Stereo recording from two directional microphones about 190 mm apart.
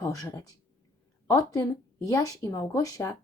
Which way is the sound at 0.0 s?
15° left (ahead or behind).